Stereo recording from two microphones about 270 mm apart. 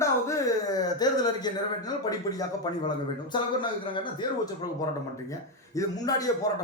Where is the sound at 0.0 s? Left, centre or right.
Centre.